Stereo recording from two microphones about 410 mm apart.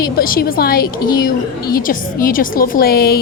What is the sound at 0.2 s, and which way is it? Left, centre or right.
A woman's voice, left.